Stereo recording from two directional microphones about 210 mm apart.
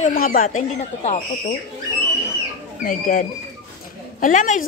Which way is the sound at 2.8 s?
40° left (ahead or behind).